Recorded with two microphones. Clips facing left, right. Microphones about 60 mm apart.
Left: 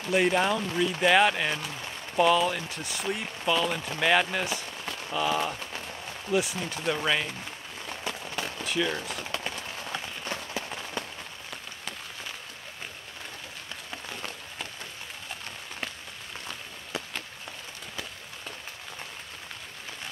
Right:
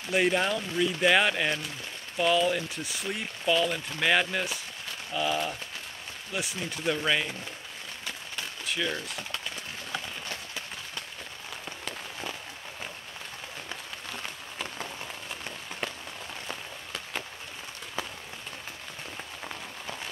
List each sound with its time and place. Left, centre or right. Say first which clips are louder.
0.1 s speech: left 2 dB; centre
8.6 s speech: left 2 dB; centre
10.3 s run: left 4 dB; left